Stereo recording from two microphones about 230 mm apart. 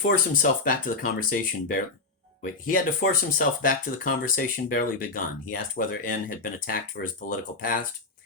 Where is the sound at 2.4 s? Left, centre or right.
Left.